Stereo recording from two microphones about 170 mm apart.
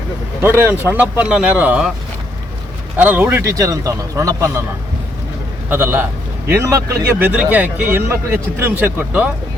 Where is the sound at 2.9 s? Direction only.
10° right (ahead or behind).